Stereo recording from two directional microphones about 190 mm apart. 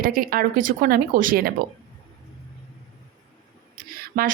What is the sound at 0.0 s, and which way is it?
A woman's voice, 50° right (ahead or behind).